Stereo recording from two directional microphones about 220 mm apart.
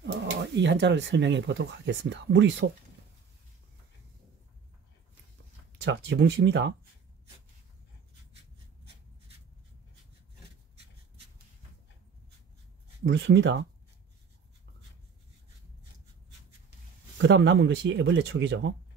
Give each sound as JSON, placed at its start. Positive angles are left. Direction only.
{"t": 0.0, "sound": "speech", "side_deg": -50}
{"t": 5.8, "sound": "speech", "side_deg": -50}
{"t": 13.0, "sound": "speech", "side_deg": -55}
{"t": 17.2, "sound": "speech", "side_deg": -55}